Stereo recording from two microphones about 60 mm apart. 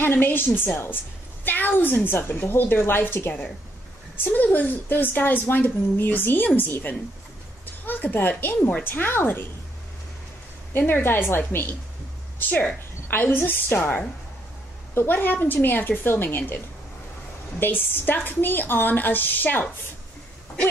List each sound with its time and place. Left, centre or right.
0.0 s a woman's voice: left
10.7 s a woman's voice: left
12.4 s a woman's voice: left
15.0 s a woman's voice: left
17.6 s a woman's voice: left